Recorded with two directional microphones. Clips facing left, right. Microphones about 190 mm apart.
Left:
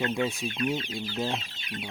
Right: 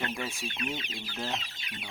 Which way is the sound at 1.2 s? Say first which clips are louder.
Left 5 dB; 15° left (ahead or behind).